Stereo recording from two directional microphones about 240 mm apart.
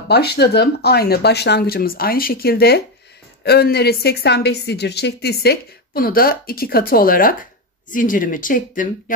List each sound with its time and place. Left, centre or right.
0.1 s a woman's voice: left